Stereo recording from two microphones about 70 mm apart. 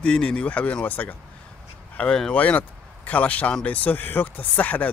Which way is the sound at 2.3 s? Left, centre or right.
Left.